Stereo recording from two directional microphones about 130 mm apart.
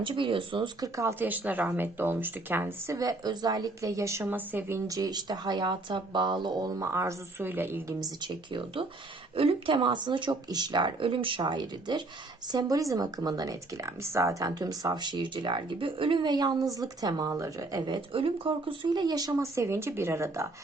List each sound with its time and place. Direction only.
0.0 s speech: 40° right (ahead or behind)
0.8 s speech: 20° right (ahead or behind)
8.2 s speech: 40° right (ahead or behind); by 20.5 s 20° right (ahead or behind)